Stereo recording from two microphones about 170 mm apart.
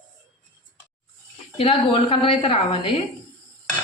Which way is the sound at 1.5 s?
35° left (ahead or behind).